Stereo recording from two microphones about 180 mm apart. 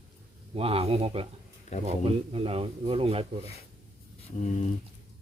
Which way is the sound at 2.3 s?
30° right (ahead or behind).